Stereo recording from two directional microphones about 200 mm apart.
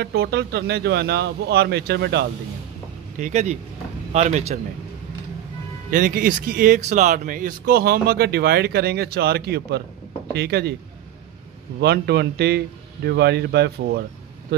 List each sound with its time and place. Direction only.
0.0 s speech: 55° right (ahead or behind)
3.2 s speech: 40° right (ahead or behind)
5.9 s speech: 45° right (ahead or behind)
11.8 s speech: 55° right (ahead or behind)